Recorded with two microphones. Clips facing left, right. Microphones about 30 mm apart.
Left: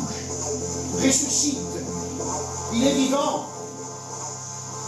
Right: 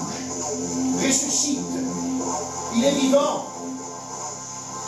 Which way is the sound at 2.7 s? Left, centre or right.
Centre.